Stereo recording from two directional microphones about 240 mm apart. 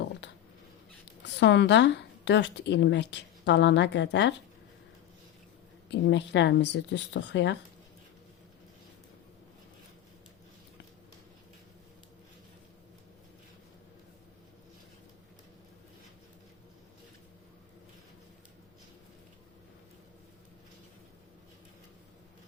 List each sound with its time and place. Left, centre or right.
1.2 s a woman's voice: left
5.9 s a woman's voice: left